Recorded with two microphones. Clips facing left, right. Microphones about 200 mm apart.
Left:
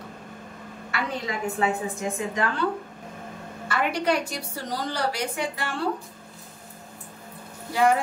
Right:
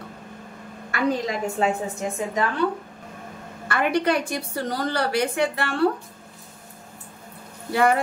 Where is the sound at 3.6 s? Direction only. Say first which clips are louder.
Right 3 dB; 55° right (ahead or behind).